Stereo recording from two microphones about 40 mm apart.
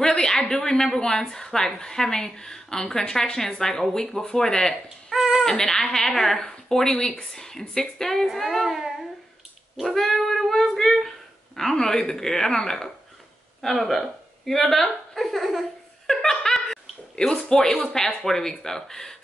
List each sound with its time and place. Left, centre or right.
0.0 s a sound: centre
0.5 s a woman's voice: centre
4.8 s a sound: centre
5.4 s a woman's voice: centre
8.3 s child singing: centre
9.8 s cat: centre
11.7 s a woman's voice: centre
16.1 s a sound: centre
17.4 s a woman's voice: centre